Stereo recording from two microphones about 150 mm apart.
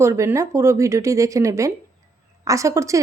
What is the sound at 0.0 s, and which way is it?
A woman's voice, 20° right (ahead or behind).